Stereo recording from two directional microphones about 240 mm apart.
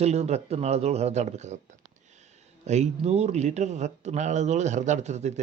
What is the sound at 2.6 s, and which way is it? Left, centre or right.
Speech, right.